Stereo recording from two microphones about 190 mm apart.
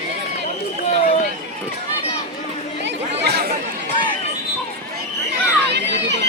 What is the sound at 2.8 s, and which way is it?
Chatter, 60° right (ahead or behind).